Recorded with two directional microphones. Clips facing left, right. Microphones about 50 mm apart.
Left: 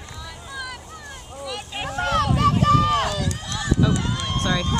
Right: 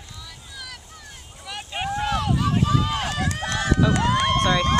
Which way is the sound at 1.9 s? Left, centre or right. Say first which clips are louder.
Left 3 dB; left.